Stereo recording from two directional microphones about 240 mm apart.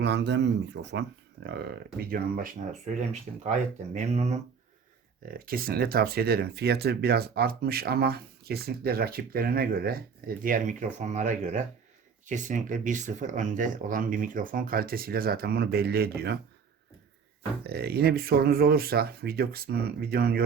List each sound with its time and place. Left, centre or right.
0.0 s speech: right
2.0 s speech: right
5.4 s speech: right
17.6 s speech: right